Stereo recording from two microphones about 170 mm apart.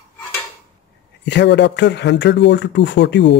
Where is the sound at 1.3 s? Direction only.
90° left.